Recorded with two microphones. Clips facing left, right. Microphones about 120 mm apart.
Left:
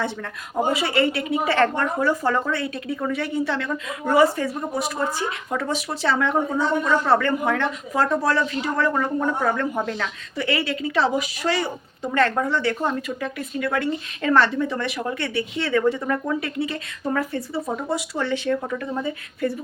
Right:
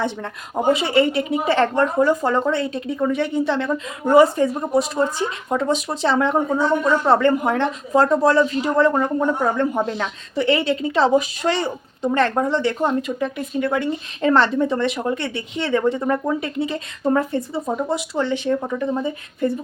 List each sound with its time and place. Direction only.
0.7 s a woman's voice: 20° right (ahead or behind)